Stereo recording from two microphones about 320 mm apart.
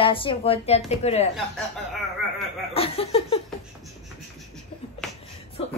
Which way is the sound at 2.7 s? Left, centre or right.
Centre.